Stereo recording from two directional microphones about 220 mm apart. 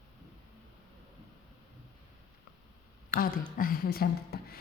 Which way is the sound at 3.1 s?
40° left (ahead or behind).